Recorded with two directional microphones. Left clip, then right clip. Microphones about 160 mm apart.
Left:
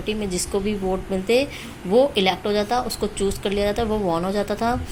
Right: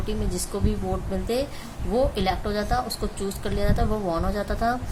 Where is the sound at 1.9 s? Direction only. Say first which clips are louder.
Left 6 dB; 15° left (ahead or behind).